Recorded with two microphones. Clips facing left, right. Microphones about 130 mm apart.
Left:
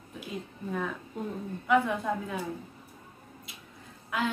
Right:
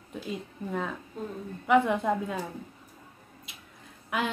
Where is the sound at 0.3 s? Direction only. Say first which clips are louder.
Right 1 dB; 20° right (ahead or behind).